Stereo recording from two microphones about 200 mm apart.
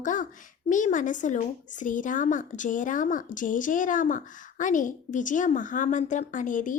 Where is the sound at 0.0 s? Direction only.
40° left (ahead or behind).